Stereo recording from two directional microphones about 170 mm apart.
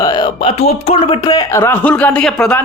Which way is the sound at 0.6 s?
40° left (ahead or behind).